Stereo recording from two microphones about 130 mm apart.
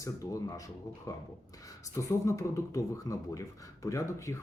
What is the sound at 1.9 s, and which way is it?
Speech, 25° left (ahead or behind).